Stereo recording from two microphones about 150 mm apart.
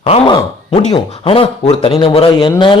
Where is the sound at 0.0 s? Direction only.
35° left (ahead or behind).